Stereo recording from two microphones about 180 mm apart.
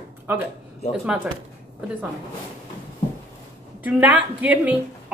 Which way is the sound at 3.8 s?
10° right (ahead or behind).